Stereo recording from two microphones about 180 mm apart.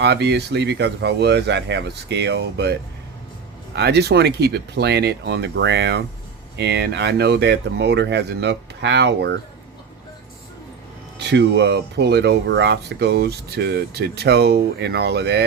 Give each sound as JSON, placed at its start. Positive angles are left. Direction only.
{"t": 0.0, "sound": "speech", "side_deg": -70}
{"t": 3.8, "sound": "speech", "side_deg": -65}
{"t": 11.2, "sound": "speech", "side_deg": -70}